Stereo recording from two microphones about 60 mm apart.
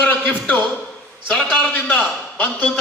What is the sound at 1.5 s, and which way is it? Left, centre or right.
Speech, left.